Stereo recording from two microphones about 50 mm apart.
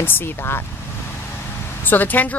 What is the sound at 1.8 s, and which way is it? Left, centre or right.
Speech, left.